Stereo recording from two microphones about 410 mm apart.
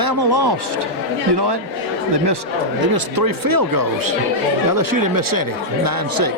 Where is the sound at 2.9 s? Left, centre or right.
Right.